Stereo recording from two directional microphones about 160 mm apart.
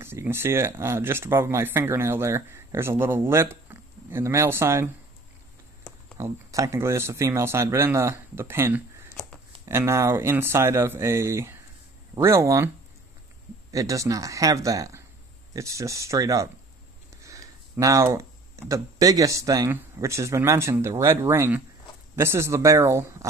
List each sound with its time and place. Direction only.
0.0 s speech: 15° right (ahead or behind)
6.1 s speech: 20° right (ahead or behind)